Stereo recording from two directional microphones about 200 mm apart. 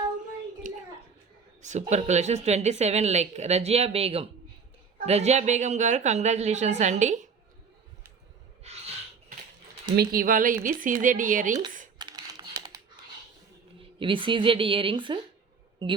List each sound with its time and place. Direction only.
0.7 s a sound: 40° right (ahead or behind)
1.9 s speech: 35° right (ahead or behind)
9.9 s speech: 50° right (ahead or behind)
11.9 s computer keyboard: 20° right (ahead or behind)
13.7 s speech: 25° right (ahead or behind)